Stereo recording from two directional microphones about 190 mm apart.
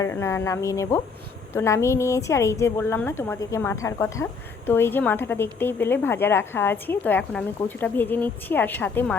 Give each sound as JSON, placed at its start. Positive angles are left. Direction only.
{"t": 0.0, "sound": "a woman's voice", "side_deg": 15}